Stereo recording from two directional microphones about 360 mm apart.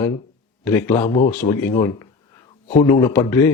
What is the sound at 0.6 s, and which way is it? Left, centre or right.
Speech, centre.